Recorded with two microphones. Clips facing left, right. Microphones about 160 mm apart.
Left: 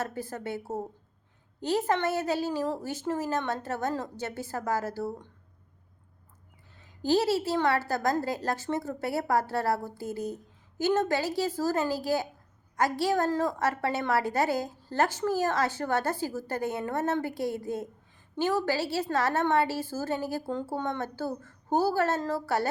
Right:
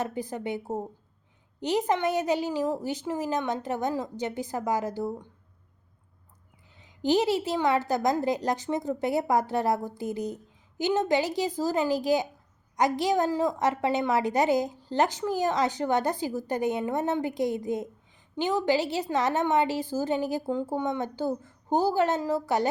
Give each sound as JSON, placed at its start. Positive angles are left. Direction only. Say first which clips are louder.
{"t": 0.0, "sound": "a woman's voice", "louder": "right 3 dB", "side_deg": -15}
{"t": 6.8, "sound": "a woman's voice", "louder": "right 1 dB", "side_deg": -20}